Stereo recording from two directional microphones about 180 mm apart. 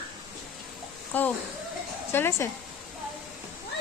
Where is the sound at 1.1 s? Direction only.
10° left (ahead or behind).